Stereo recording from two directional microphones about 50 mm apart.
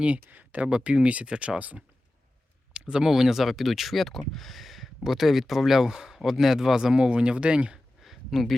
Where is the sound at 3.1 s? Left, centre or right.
Centre.